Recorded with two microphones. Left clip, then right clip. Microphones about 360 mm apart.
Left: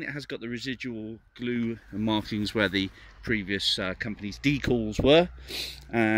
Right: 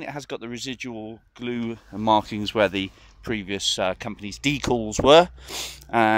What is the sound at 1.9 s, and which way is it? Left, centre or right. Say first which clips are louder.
Speech: right 10 dB; right.